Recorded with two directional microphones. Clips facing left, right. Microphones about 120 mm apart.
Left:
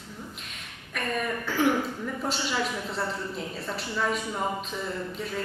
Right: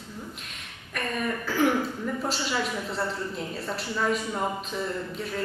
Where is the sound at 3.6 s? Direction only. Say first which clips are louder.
Right 2 dB; centre (ahead or behind).